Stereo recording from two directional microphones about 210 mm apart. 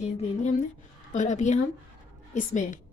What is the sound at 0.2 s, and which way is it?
A woman's voice, 35° left (ahead or behind).